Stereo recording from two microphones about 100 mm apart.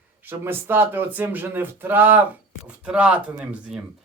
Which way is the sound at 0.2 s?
20° right (ahead or behind).